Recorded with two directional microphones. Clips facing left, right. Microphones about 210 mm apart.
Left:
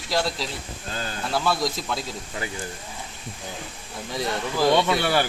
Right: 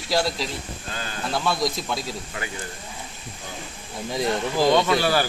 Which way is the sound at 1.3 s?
Centre (ahead or behind).